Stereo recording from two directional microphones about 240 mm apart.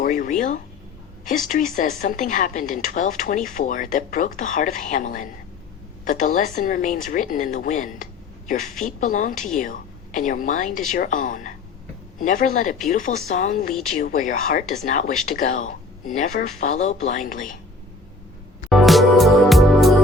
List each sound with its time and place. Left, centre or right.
0.0 s speech: left
18.7 s music: centre